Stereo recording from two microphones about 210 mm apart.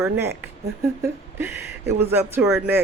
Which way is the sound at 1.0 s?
10° right (ahead or behind).